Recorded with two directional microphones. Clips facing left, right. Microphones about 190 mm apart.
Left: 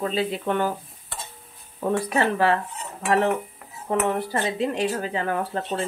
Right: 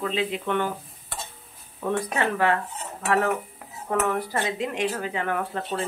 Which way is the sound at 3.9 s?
25° left (ahead or behind).